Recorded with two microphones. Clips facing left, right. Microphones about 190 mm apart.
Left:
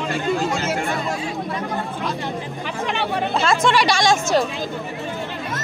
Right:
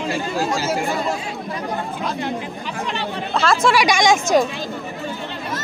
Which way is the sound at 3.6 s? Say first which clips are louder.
Right 3 dB; 10° right (ahead or behind).